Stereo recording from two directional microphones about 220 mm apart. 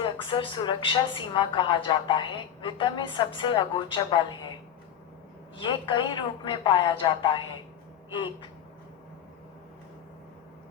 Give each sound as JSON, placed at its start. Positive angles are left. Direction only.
{"t": 0.0, "sound": "a woman's voice", "side_deg": 20}
{"t": 5.5, "sound": "a woman's voice", "side_deg": 20}